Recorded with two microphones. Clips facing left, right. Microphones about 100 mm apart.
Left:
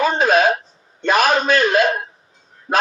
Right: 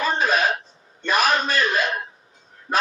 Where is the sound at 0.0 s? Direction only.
45° left (ahead or behind).